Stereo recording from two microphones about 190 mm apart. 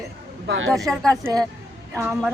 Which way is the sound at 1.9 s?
15° right (ahead or behind).